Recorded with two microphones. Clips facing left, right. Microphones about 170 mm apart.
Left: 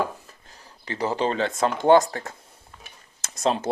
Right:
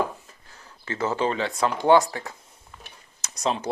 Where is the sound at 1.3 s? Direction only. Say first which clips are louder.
Left 1 dB; 45° left (ahead or behind).